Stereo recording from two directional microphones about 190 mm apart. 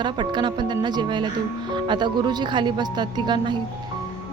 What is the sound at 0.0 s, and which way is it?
Speech, 25° right (ahead or behind).